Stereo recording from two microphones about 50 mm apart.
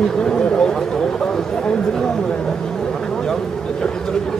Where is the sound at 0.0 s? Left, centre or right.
Centre.